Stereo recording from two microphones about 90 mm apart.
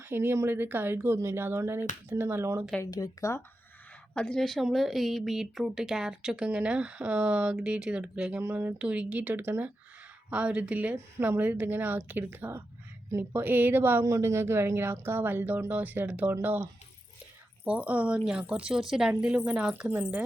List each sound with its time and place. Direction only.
0.0 s speech: 25° right (ahead or behind)
2.8 s speech: 40° left (ahead or behind)
4.1 s speech: 10° left (ahead or behind); by 14.0 s 20° right (ahead or behind)
14.0 s speech: 35° right (ahead or behind)
17.7 s speech: 15° right (ahead or behind)
19.9 s speech: 20° right (ahead or behind)